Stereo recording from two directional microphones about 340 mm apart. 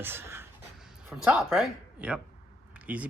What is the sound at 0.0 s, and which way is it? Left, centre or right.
Speech, centre.